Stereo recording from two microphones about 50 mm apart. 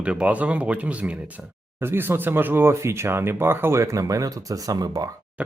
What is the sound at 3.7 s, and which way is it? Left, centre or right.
Speech, right.